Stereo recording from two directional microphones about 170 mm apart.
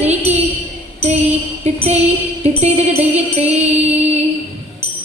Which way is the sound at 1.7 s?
40° right (ahead or behind).